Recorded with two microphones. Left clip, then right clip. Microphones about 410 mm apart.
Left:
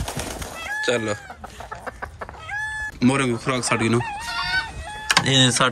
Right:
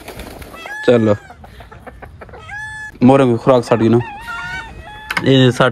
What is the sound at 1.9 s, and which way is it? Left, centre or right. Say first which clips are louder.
Chicken: left 2 dB; centre.